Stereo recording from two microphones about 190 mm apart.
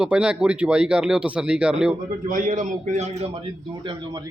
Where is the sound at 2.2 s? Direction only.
45° right (ahead or behind).